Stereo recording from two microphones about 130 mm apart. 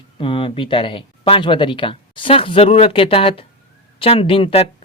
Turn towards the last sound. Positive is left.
turn(degrees=45)  # may be behind; listen again after turning